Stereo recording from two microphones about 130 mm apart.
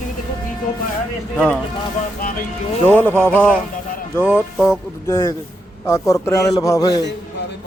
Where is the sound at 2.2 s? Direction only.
90° left.